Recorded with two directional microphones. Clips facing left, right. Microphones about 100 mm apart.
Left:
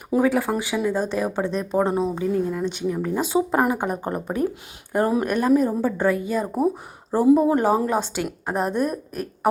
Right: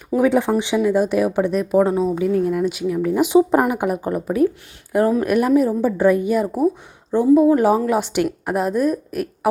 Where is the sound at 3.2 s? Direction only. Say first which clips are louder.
Right 9 dB; 15° right (ahead or behind).